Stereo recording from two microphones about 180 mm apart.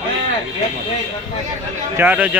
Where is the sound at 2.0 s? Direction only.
10° right (ahead or behind).